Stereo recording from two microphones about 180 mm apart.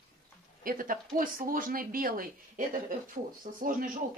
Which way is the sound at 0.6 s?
50° right (ahead or behind).